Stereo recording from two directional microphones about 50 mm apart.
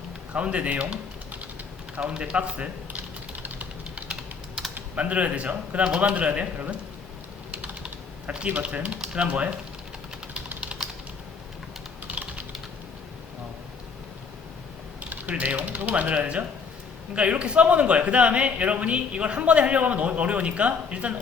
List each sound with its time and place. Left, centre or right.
0.3 s speech: right
2.0 s typewriter: right
4.9 s a man's voice: right
8.4 s a man's voice: right
10.6 s typing: right
12.0 s typing: right
15.1 s a man's voice: right